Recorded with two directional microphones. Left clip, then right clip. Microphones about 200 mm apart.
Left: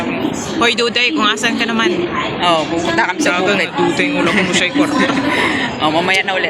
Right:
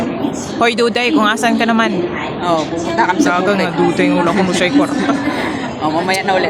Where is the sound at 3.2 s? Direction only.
45° right (ahead or behind).